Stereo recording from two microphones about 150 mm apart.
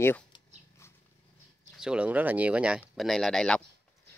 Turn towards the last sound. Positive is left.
turn(degrees=5)  # may be behind; listen again after turning